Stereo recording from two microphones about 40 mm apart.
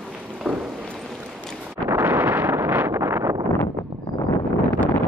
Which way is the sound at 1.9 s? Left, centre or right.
Right.